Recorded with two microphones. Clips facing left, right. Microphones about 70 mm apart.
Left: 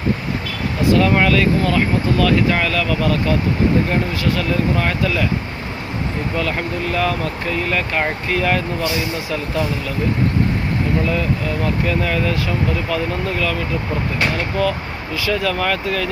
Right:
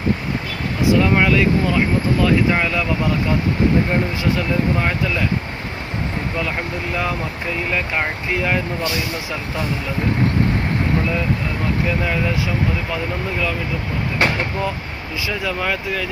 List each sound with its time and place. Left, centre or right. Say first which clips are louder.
0.9 s speech: left 1 dB; centre
6.9 s speech: left 3 dB; centre
11.9 s speech: left 1 dB; centre
15.3 s speech: left 4 dB; centre